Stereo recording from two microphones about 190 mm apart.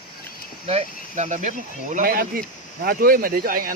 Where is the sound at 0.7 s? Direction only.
35° right (ahead or behind).